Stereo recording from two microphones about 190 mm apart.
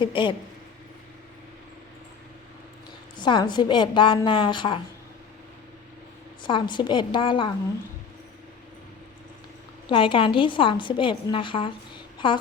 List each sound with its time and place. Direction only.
0.0 s a woman's voice: 25° left (ahead or behind)
3.2 s a woman's voice: 25° left (ahead or behind)
6.5 s a woman's voice: 25° left (ahead or behind)
9.9 s a woman's voice: 25° left (ahead or behind)